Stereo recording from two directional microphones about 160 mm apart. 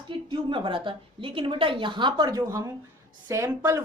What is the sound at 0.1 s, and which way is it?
A woman's voice, 30° right (ahead or behind).